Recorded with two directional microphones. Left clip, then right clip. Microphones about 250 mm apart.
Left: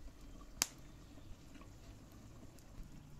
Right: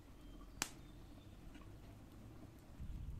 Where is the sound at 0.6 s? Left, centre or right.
Left.